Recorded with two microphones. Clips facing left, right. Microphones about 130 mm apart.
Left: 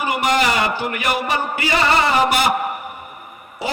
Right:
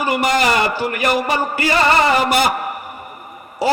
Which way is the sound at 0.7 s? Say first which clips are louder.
Right 3 dB; 40° right (ahead or behind).